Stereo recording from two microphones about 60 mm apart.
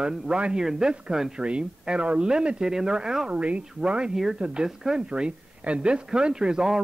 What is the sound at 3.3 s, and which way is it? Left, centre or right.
Speech, right.